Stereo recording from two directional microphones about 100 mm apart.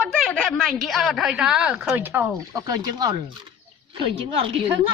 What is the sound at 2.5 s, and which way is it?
Speech, 40° right (ahead or behind).